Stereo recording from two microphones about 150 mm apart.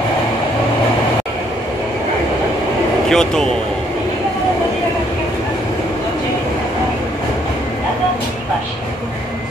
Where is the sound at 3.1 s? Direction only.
5° left (ahead or behind).